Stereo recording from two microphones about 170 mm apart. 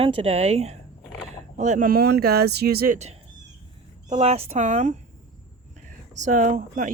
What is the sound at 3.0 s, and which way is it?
Speech, 40° right (ahead or behind).